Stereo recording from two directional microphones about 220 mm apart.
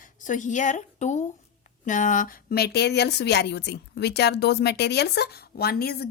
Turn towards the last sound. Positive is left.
turn(degrees=45)  # may be behind; listen again after turning